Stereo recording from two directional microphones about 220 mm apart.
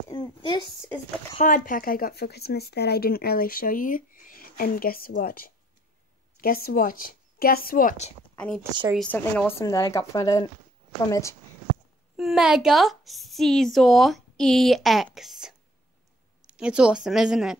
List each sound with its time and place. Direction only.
0.1 s speech: 20° left (ahead or behind)
1.4 s speech: 40° left (ahead or behind)
8.9 s speech: 5° left (ahead or behind)
12.2 s a woman's voice: centre (ahead or behind)
16.5 s a woman's voice: 5° right (ahead or behind)